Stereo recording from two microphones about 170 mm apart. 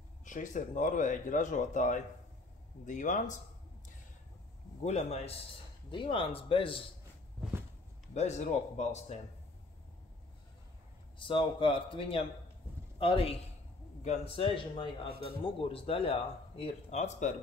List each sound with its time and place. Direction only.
0.2 s speech: 50° left (ahead or behind)
4.8 s speech: 40° left (ahead or behind)
5.9 s speech: 30° left (ahead or behind)
8.1 s speech: 40° left (ahead or behind)
11.1 s speech: 30° left (ahead or behind)